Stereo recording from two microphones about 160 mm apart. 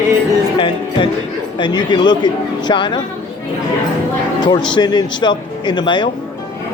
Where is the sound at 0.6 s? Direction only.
30° left (ahead or behind).